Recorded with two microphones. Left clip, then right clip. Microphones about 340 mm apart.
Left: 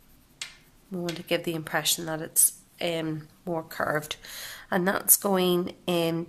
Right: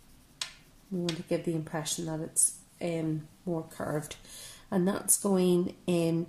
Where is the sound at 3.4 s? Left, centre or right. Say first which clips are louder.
Left 7 dB; left.